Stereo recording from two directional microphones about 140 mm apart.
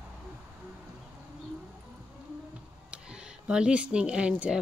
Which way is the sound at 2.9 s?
5° right (ahead or behind).